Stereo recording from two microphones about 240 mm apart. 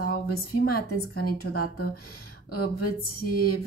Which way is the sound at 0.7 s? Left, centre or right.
Left.